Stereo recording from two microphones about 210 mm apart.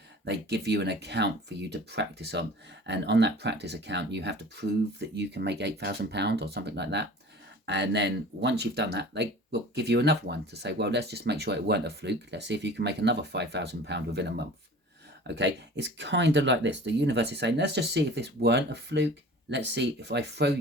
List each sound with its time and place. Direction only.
0.3 s speech: 55° right (ahead or behind)